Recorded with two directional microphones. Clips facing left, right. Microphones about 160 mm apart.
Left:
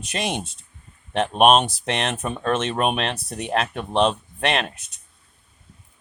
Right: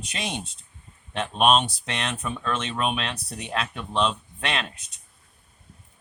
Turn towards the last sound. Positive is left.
turn(degrees=45)  # may be behind; listen again after turning